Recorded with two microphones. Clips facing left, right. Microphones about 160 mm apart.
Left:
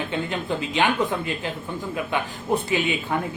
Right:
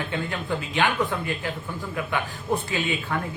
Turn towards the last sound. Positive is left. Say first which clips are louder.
# left 3 dB
turn(degrees=20)  # may be behind; listen again after turning